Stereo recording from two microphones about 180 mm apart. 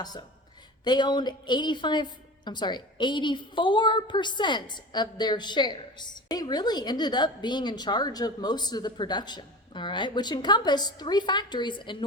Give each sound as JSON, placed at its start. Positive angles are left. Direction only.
{"t": 0.9, "sound": "a woman's voice", "side_deg": 25}